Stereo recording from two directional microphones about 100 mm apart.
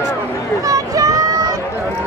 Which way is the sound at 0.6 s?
35° right (ahead or behind).